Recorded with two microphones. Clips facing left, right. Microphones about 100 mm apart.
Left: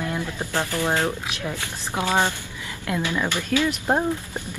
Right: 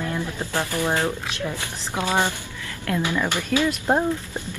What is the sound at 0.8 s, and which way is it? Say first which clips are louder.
A woman's voice: even; 15° left (ahead or behind).